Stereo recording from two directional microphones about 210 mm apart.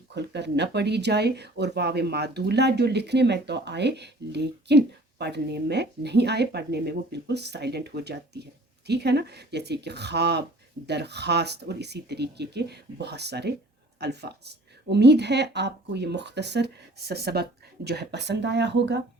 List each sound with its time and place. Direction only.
0.1 s speech: 55° right (ahead or behind)